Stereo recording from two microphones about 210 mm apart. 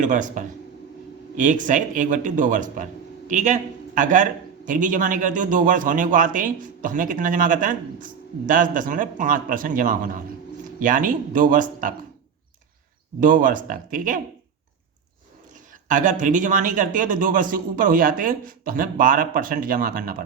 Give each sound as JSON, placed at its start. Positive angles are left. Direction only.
{"t": 0.0, "sound": "a man's voice", "side_deg": -35}
{"t": 13.1, "sound": "a man's voice", "side_deg": -40}
{"t": 15.9, "sound": "a man's voice", "side_deg": -35}